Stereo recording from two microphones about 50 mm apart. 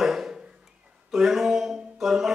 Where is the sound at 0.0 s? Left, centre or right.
Centre.